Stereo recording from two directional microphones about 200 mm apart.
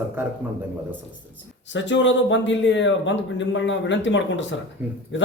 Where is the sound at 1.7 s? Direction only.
65° left (ahead or behind).